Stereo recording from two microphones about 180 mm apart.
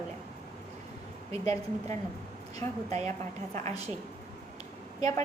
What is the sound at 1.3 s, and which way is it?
A woman's voice, 35° right (ahead or behind).